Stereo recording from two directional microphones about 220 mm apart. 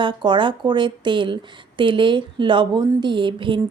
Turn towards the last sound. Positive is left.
turn(degrees=-20)  # may be behind; listen again after turning